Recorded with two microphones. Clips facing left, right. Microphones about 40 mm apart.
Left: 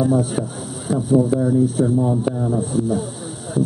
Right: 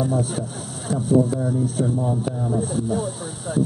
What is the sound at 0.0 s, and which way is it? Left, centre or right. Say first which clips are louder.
A man's voice: left 5 dB; centre.